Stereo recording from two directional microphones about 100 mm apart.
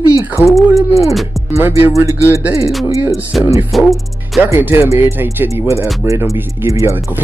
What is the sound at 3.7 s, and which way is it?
Speech, centre (ahead or behind).